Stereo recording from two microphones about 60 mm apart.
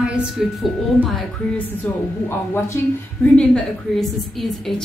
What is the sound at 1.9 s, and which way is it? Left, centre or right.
Speech, left.